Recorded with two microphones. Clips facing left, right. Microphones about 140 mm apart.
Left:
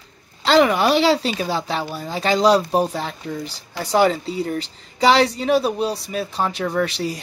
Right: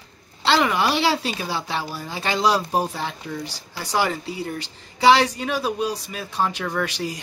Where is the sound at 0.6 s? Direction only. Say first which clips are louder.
Left 8 dB; 40° left (ahead or behind).